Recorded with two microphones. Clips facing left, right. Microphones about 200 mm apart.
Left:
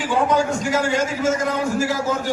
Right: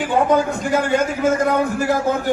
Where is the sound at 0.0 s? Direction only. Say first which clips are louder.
Right 2 dB; 55° right (ahead or behind).